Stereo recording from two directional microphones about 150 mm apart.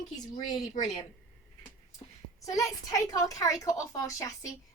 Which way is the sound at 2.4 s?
20° left (ahead or behind).